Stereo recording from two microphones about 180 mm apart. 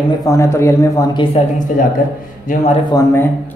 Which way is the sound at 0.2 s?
15° left (ahead or behind).